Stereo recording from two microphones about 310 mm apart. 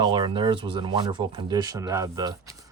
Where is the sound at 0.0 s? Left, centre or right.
Centre.